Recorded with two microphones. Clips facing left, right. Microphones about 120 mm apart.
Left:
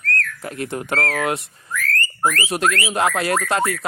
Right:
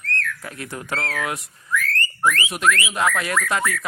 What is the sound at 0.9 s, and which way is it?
Speech, 45° left (ahead or behind).